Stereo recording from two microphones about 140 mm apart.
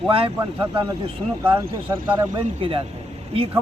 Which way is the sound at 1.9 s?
15° right (ahead or behind).